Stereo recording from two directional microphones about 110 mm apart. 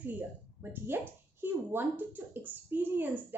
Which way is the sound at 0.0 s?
20° right (ahead or behind).